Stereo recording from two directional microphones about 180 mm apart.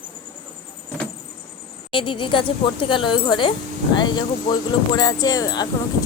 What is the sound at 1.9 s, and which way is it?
Speech, 30° left (ahead or behind).